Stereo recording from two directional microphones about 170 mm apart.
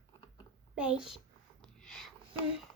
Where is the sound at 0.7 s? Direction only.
5° right (ahead or behind).